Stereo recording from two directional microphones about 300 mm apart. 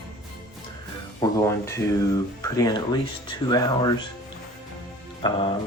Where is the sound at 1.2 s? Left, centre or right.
Centre.